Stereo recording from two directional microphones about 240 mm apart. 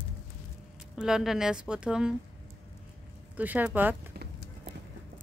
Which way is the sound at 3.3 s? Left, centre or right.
Centre.